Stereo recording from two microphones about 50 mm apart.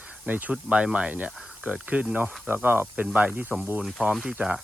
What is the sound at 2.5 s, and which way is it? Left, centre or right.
Speech, right.